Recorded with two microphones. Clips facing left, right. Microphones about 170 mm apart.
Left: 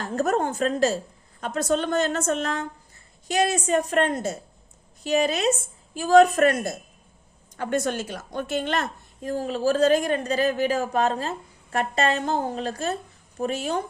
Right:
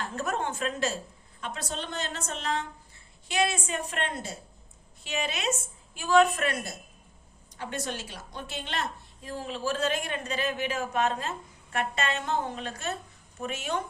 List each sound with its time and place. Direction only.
0.0 s a woman's voice: 40° left (ahead or behind)